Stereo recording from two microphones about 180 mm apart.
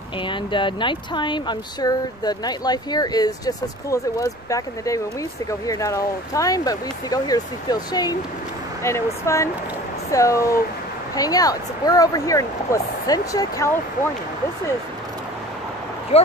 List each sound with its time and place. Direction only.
0.2 s speech: 25° left (ahead or behind)
16.1 s speech: 35° left (ahead or behind)